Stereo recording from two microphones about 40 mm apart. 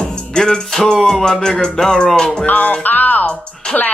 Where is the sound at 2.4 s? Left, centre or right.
Left.